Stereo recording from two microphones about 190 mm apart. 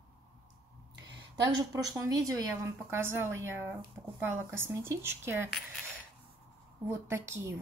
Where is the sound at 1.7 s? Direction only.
20° right (ahead or behind).